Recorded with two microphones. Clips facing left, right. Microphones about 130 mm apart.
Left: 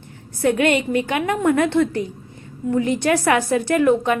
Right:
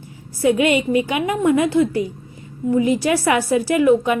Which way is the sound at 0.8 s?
10° right (ahead or behind).